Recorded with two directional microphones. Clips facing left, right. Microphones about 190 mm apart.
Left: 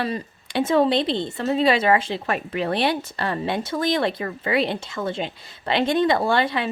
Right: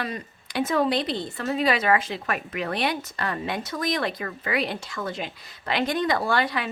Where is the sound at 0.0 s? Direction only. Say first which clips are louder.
Left 5 dB; 30° left (ahead or behind).